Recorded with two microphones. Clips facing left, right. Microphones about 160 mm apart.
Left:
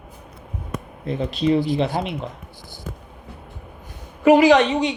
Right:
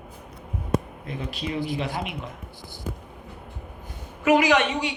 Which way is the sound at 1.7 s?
35° left (ahead or behind).